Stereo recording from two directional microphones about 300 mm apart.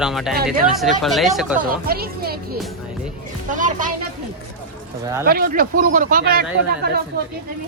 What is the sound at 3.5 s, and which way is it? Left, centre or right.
Speech, right.